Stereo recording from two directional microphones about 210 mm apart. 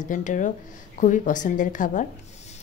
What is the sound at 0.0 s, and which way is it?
A woman's voice, 35° left (ahead or behind).